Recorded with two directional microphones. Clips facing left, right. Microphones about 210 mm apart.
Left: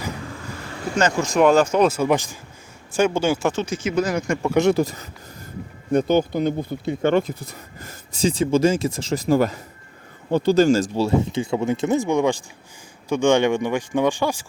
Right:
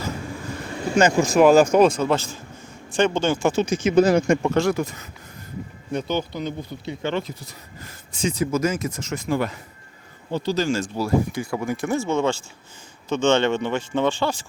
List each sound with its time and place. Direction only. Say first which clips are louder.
0.9 s speech: right 2 dB; 10° right (ahead or behind)
1.9 s speech: left 2 dB; 15° left (ahead or behind)
3.5 s speech: right 5 dB; 15° right (ahead or behind)
4.7 s speech: left 5 dB; 35° left (ahead or behind)
5.9 s speech: left 7 dB; 50° left (ahead or behind)
10.3 s speech: left 7 dB; 50° left (ahead or behind)
11.0 s speech: left 2 dB; 25° left (ahead or behind)